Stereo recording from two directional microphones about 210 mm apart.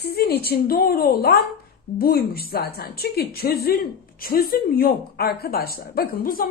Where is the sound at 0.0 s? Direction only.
50° left (ahead or behind).